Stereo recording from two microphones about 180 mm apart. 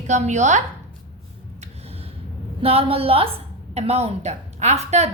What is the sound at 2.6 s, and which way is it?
A woman's voice, 30° right (ahead or behind).